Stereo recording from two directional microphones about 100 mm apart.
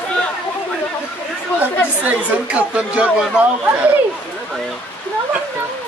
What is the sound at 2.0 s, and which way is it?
Speech, 10° right (ahead or behind).